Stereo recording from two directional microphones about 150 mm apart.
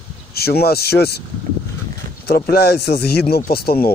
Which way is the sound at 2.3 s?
90° left.